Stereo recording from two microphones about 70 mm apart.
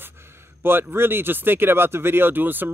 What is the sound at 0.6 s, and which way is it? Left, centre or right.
Speech, right.